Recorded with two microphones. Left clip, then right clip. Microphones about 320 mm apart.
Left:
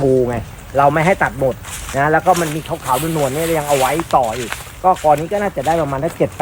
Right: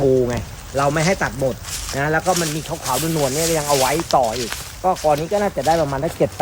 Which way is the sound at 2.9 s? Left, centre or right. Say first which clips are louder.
Left 3 dB; centre.